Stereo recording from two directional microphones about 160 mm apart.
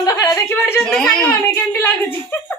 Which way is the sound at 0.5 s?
15° left (ahead or behind).